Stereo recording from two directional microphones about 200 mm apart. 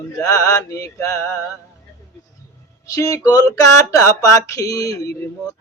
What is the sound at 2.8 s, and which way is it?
Speech, 15° left (ahead or behind).